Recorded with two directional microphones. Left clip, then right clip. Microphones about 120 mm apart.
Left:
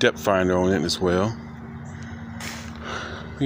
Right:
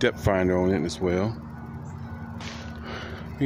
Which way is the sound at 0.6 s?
10° left (ahead or behind).